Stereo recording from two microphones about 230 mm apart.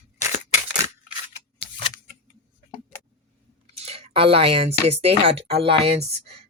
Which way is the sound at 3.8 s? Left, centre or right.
Right.